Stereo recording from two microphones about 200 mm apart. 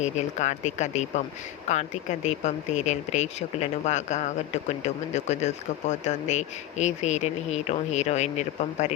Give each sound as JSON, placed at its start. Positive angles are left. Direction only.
{"t": 0.0, "sound": "speech", "side_deg": 35}